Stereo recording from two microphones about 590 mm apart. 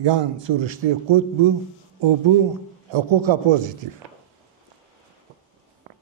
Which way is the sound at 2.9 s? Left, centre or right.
Right.